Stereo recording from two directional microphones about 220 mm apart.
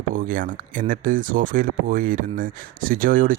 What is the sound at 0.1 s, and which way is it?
Speech, 40° right (ahead or behind).